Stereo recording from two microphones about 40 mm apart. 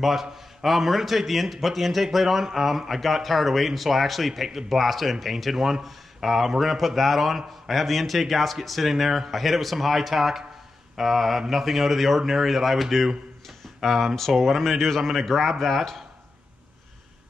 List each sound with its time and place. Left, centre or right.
0.0 s speech: centre